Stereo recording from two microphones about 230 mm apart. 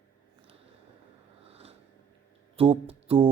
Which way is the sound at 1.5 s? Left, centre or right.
Right.